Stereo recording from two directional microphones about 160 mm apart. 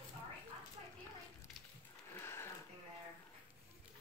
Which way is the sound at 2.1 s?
15° left (ahead or behind).